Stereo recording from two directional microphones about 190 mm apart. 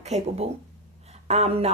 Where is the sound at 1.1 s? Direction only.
35° right (ahead or behind).